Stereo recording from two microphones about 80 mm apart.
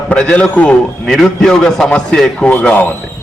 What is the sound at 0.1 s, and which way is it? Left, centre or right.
Speech, centre.